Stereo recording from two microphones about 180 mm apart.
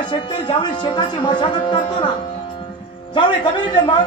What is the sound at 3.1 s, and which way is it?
Speech, 25° left (ahead or behind).